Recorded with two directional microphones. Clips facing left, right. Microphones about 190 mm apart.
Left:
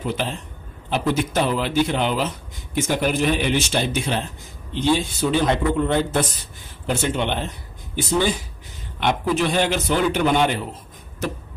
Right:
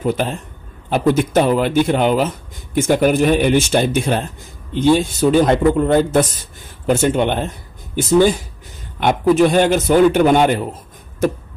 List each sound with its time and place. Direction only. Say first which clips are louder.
0.0 s speech: right 6 dB; 50° right (ahead or behind)